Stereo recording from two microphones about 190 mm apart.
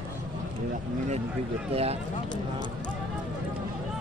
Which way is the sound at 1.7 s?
30° right (ahead or behind).